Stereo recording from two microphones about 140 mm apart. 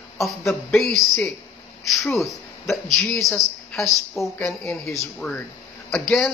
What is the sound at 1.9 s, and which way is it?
A woman's voice, centre (ahead or behind).